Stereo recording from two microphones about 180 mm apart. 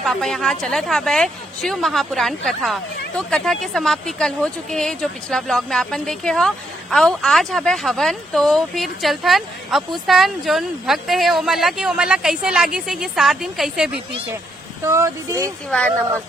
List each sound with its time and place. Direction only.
0.0 s speech: centre (ahead or behind)
14.8 s speech: 15° right (ahead or behind)
15.7 s speech: 5° left (ahead or behind)